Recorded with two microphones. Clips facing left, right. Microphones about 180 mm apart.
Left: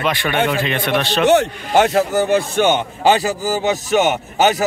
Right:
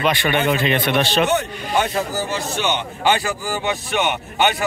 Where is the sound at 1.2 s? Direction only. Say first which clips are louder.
Left 6 dB; 80° left.